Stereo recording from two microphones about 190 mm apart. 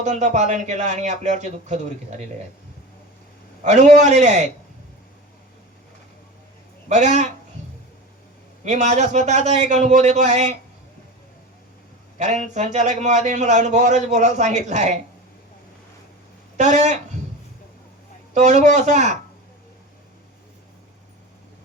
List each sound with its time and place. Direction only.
0.0 s a man's voice: 40° right (ahead or behind)
3.6 s a man's voice: 40° right (ahead or behind)
6.8 s a man's voice: 40° right (ahead or behind)
8.6 s a man's voice: 40° right (ahead or behind)
12.2 s a man's voice: 40° right (ahead or behind)
16.6 s a man's voice: 40° right (ahead or behind)
18.3 s a man's voice: 40° right (ahead or behind)